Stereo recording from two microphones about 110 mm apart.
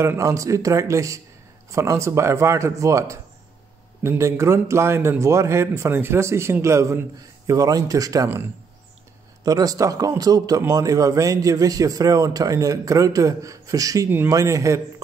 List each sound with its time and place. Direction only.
0.0 s a man's voice: 25° right (ahead or behind)
9.4 s a man's voice: 35° right (ahead or behind)
14.0 s speech: 20° right (ahead or behind)
14.3 s a man's voice: 30° right (ahead or behind)